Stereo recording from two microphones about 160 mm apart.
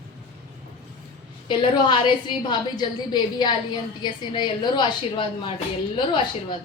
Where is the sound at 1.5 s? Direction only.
30° left (ahead or behind).